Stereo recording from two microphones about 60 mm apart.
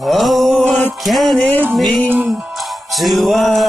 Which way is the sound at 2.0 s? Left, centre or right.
Right.